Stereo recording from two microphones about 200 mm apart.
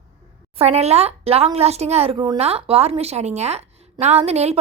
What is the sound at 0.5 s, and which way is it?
A woman's voice, 30° right (ahead or behind).